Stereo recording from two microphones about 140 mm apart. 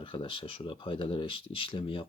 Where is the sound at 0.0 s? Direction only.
35° left (ahead or behind).